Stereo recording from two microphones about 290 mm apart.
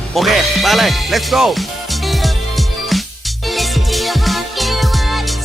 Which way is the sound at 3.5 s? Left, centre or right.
Centre.